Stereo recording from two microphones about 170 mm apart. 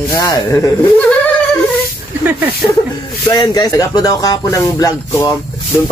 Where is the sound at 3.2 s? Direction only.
25° left (ahead or behind).